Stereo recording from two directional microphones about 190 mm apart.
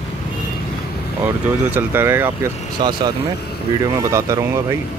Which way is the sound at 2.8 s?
25° right (ahead or behind).